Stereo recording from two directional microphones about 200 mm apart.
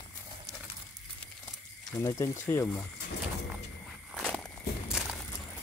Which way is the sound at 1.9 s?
15° left (ahead or behind).